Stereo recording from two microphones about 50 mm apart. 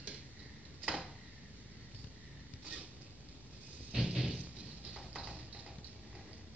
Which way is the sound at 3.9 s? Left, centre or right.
Centre.